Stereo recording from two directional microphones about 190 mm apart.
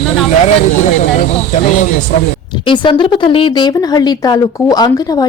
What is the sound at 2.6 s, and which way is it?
A woman's voice, 25° left (ahead or behind).